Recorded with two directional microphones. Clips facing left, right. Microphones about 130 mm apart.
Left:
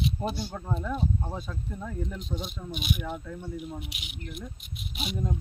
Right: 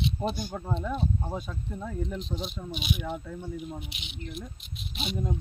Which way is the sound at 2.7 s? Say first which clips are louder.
Left 1 dB; 50° left (ahead or behind).